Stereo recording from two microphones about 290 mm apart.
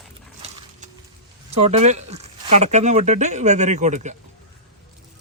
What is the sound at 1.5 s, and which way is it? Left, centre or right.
Speech, right.